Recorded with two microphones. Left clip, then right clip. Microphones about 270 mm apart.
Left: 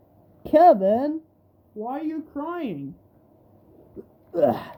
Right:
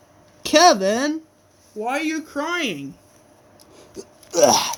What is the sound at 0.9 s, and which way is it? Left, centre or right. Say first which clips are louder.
Speech: right 1 dB; centre.